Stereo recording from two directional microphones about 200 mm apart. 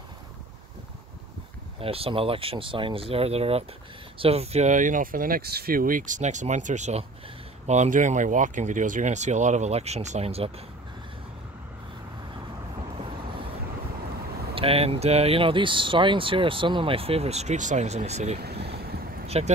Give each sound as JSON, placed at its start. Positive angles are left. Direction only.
{"t": 1.8, "sound": "speech", "side_deg": -30}
{"t": 14.5, "sound": "speech", "side_deg": -30}
{"t": 18.4, "sound": "vehicle", "side_deg": -55}
{"t": 19.2, "sound": "a sound", "side_deg": -30}